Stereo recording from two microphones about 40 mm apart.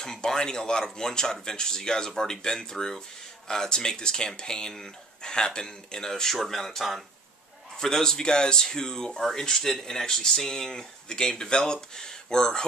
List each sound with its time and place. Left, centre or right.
0.0 s speech: centre